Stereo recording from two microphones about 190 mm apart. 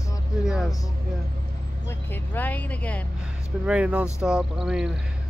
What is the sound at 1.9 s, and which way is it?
Speech, 10° left (ahead or behind).